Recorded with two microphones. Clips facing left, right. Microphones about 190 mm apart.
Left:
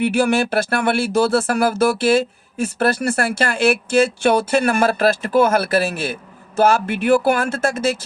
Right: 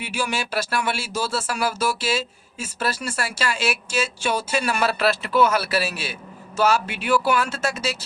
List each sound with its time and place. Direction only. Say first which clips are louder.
0.0 s speech: left 11 dB; 55° left (ahead or behind)